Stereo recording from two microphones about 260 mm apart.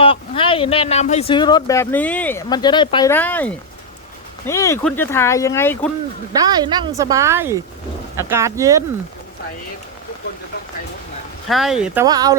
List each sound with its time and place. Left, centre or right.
0.0 s speech: left
6.3 s a woman's voice: centre
11.4 s speech: centre
12.0 s a woman's voice: centre